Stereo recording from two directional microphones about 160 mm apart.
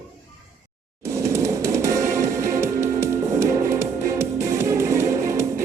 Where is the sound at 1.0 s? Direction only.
20° right (ahead or behind).